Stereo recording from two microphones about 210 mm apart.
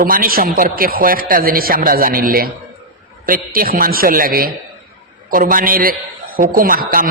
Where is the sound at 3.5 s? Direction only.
45° right (ahead or behind).